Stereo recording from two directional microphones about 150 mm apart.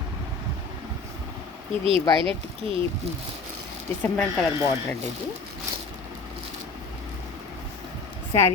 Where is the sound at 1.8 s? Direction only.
40° right (ahead or behind).